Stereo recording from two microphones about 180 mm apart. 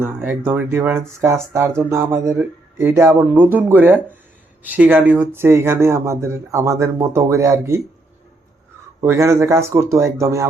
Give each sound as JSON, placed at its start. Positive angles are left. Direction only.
{"t": 0.0, "sound": "speech", "side_deg": -10}
{"t": 9.0, "sound": "speech", "side_deg": -15}